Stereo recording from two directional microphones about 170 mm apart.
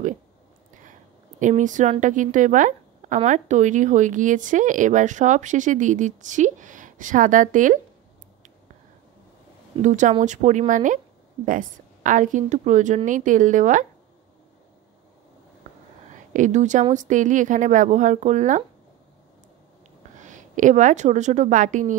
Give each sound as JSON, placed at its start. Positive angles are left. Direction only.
{"t": 1.4, "sound": "a woman's voice", "side_deg": -45}
{"t": 9.8, "sound": "a woman's voice", "side_deg": -45}
{"t": 16.1, "sound": "a sound", "side_deg": -45}
{"t": 16.9, "sound": "a woman's voice", "side_deg": -45}
{"t": 20.2, "sound": "a woman's voice", "side_deg": -45}